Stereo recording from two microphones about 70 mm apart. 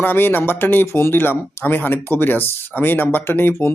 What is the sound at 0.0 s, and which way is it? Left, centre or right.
Speech, left.